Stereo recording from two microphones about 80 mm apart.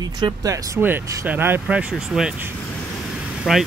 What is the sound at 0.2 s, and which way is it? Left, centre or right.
Speech, right.